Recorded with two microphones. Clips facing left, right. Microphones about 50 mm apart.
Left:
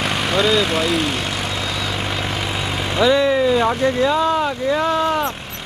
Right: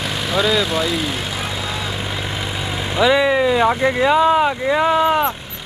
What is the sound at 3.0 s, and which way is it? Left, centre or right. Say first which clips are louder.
Speech: right 1 dB; centre.